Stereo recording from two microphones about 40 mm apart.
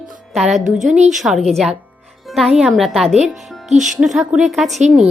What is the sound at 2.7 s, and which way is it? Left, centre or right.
Speech, centre.